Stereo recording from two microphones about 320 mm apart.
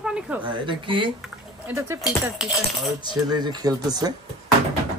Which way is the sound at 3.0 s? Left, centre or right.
Centre.